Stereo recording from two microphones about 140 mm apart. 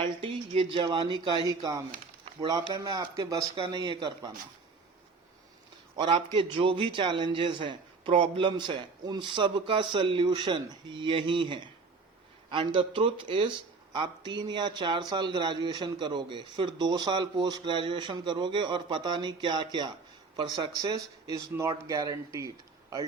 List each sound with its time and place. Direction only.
0.0 s speech: 40° right (ahead or behind)
6.0 s speech: 35° right (ahead or behind)